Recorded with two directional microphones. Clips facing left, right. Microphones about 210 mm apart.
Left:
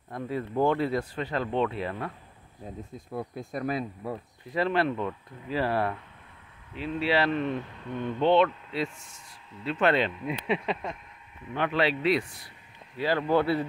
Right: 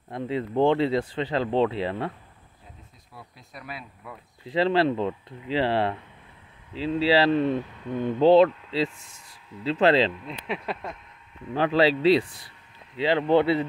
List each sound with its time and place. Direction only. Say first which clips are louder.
0.1 s speech: right 3 dB; 25° right (ahead or behind)
3.1 s speech: left 13 dB; 50° left (ahead or behind)
4.5 s speech: right 4 dB; 30° right (ahead or behind)
10.4 s a sound: left 1 dB; centre (ahead or behind)
11.5 s speech: right 5 dB; 35° right (ahead or behind)